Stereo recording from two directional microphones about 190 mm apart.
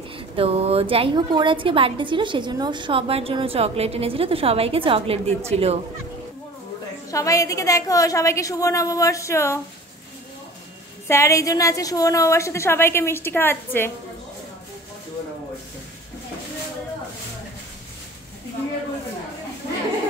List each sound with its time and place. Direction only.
0.4 s a woman's voice: 30° right (ahead or behind)
7.1 s a woman's voice: 15° left (ahead or behind)
11.1 s a woman's voice: 15° left (ahead or behind)